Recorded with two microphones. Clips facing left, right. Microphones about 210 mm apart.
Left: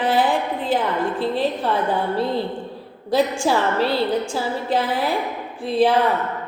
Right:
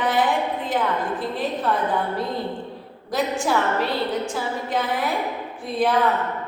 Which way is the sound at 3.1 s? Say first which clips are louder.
Left 3 dB; 30° left (ahead or behind).